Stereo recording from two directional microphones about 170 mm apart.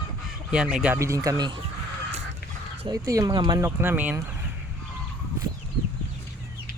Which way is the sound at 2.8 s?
20° right (ahead or behind).